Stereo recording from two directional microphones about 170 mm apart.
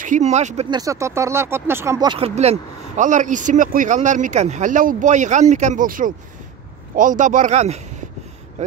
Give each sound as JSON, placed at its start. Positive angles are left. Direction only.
{"t": 0.0, "sound": "speech", "side_deg": -45}
{"t": 0.7, "sound": "speech", "side_deg": -20}